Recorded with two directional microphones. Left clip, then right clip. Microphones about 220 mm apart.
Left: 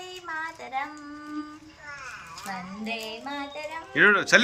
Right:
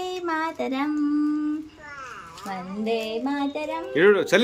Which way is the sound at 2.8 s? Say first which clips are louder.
Right 10 dB; 30° right (ahead or behind).